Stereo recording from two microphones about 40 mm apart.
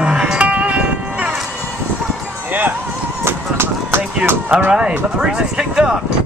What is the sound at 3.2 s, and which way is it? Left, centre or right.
Run, right.